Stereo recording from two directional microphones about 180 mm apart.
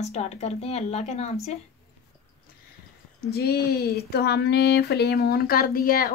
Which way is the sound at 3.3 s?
60° left (ahead or behind).